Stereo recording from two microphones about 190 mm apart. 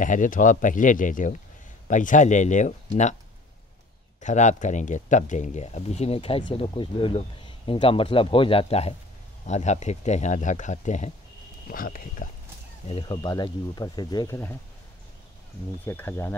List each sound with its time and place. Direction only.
0.0 s speech: 45° left (ahead or behind)
4.2 s speech: 40° left (ahead or behind)
12.8 s speech: 30° left (ahead or behind); by 14.6 s 15° left (ahead or behind)
15.8 s speech: 10° left (ahead or behind)